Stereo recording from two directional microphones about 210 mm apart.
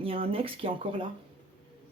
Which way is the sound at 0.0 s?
25° right (ahead or behind).